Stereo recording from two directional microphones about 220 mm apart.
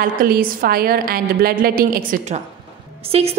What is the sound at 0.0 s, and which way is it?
A woman's voice, 40° right (ahead or behind).